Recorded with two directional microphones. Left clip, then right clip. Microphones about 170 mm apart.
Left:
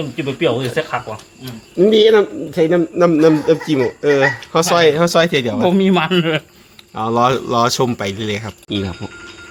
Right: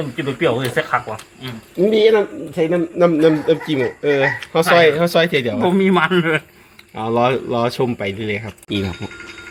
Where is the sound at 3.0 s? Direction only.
20° left (ahead or behind).